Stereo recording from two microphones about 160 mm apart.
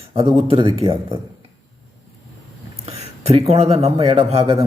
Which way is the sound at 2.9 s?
40° right (ahead or behind).